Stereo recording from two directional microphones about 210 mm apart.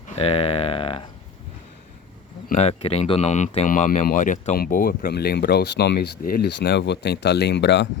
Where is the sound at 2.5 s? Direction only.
30° left (ahead or behind).